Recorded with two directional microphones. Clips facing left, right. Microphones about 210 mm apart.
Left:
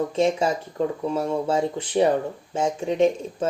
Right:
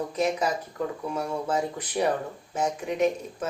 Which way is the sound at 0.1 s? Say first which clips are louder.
Left 5 dB; 30° left (ahead or behind).